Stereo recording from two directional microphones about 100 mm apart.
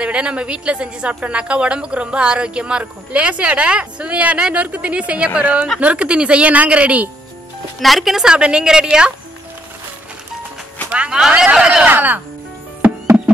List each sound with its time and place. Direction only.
0.0 s a woman's voice: 10° right (ahead or behind)
7.8 s a woman's voice: centre (ahead or behind)
10.9 s a woman's voice: 10° right (ahead or behind)
11.8 s a woman's voice: 15° right (ahead or behind)